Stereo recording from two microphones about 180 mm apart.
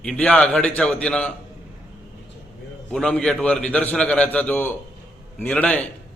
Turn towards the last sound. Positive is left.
turn(degrees=10)  # may be behind; listen again after turning